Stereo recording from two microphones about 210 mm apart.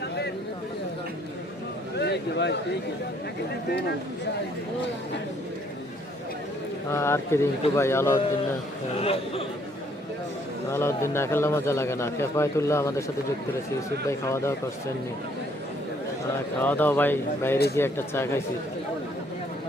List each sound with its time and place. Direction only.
2.0 s a sound: 55° left (ahead or behind)
6.9 s a man's voice: 10° left (ahead or behind)
9.0 s speech: 25° left (ahead or behind)
10.7 s a man's voice: 10° left (ahead or behind)
14.1 s a man's voice: 15° left (ahead or behind)
16.6 s a man's voice: 10° left (ahead or behind)